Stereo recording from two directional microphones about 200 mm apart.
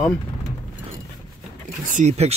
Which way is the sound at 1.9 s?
35° right (ahead or behind).